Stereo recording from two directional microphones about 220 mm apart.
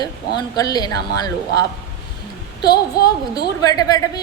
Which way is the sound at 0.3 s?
15° left (ahead or behind).